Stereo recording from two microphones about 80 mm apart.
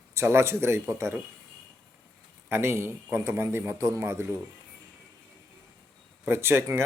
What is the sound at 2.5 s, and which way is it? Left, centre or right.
A man's voice, right.